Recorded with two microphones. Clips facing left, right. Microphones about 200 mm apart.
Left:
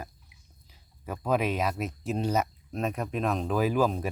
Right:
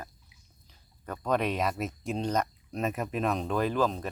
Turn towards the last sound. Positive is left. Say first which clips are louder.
# left 2 dB
turn(degrees=10)  # may be behind; listen again after turning